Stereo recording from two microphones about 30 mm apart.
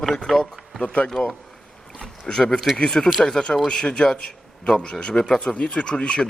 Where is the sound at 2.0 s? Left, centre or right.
Left.